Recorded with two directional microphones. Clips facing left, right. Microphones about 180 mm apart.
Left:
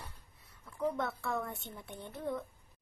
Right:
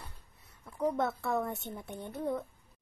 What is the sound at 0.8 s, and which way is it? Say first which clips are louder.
A child's voice: right 4 dB; 40° right (ahead or behind).